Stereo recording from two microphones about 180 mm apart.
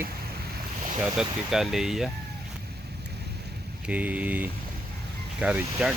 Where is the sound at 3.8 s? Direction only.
10° right (ahead or behind).